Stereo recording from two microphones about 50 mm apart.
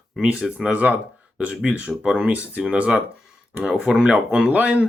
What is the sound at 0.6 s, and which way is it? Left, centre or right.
Speech, right.